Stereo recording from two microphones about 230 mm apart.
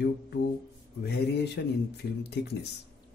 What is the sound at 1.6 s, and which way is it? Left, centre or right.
Speech, left.